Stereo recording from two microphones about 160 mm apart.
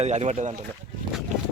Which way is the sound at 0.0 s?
45° right (ahead or behind).